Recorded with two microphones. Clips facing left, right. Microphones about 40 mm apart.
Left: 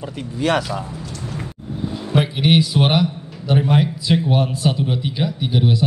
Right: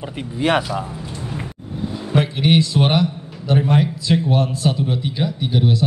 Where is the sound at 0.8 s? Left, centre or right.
Right.